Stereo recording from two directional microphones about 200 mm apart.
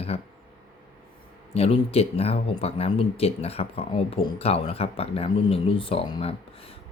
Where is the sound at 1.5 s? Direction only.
30° left (ahead or behind).